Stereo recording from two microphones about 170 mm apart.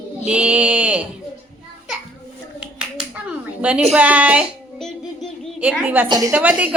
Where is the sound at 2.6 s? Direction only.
5° right (ahead or behind).